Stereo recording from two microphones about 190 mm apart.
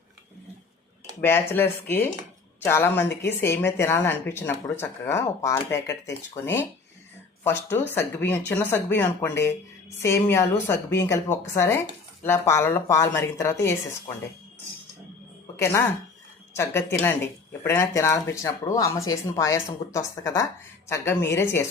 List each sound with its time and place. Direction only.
1.2 s a woman's voice: 10° left (ahead or behind)
16.6 s a woman's voice: 10° left (ahead or behind)